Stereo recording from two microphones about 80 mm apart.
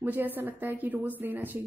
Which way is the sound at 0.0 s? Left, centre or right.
Right.